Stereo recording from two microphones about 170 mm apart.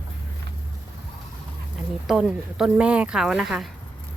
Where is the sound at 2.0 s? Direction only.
Centre (ahead or behind).